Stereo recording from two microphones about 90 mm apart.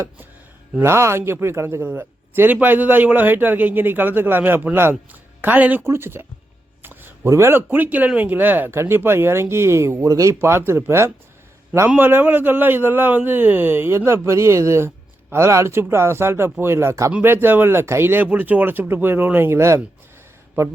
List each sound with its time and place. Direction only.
0.8 s speech: 30° right (ahead or behind)
7.3 s speech: 30° right (ahead or behind)
17.1 s speech: 20° right (ahead or behind)